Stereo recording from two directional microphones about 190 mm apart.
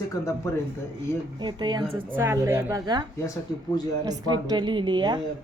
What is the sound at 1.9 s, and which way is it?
A woman's voice, 10° right (ahead or behind).